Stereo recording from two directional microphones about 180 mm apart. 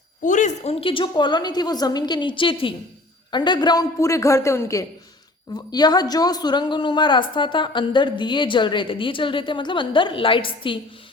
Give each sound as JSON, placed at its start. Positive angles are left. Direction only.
{"t": 0.3, "sound": "a woman's voice", "side_deg": 45}